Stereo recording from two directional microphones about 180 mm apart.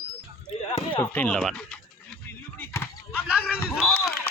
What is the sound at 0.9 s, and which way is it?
Speech, 10° left (ahead or behind).